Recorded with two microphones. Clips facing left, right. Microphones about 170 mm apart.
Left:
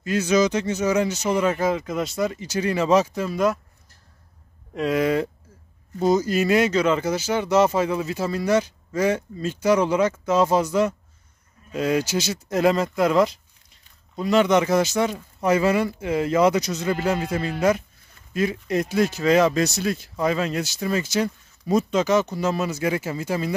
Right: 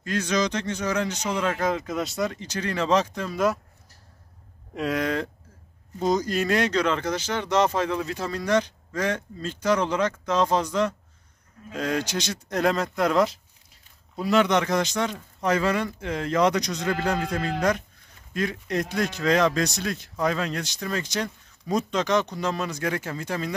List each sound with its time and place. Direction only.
0.0 s speech: 5° left (ahead or behind)
4.7 s speech: centre (ahead or behind)